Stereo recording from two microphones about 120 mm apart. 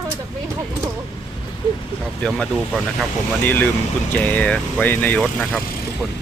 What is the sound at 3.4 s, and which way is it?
Speech, 15° left (ahead or behind).